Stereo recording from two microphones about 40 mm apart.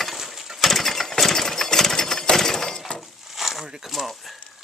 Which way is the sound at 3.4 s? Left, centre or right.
Centre.